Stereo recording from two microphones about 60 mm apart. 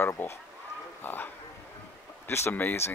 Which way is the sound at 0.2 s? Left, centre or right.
Left.